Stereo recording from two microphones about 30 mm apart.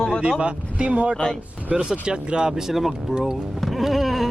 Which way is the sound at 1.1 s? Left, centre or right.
Left.